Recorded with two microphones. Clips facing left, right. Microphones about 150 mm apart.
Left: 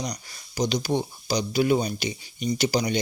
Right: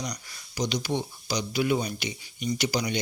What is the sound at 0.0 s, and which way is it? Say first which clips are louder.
Speech: left 3 dB; 35° left (ahead or behind).